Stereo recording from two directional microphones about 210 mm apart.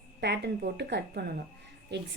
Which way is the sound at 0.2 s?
50° right (ahead or behind).